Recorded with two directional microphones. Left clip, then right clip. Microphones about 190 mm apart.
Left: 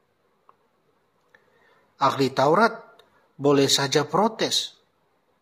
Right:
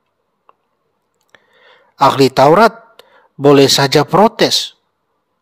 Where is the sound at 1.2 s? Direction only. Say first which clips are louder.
Right 12 dB; 50° right (ahead or behind).